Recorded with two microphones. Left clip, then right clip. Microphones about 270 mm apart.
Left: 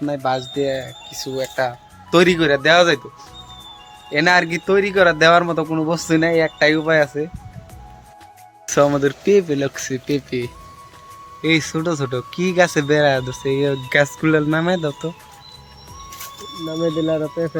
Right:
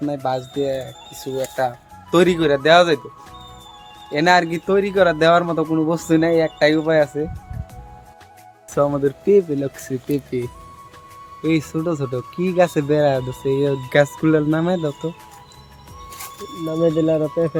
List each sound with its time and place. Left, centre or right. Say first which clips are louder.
0.0 s speech: left 2 dB; centre
4.1 s speech: even; centre
8.6 s speech: left 3 dB; centre
16.8 s speech: right 2 dB; right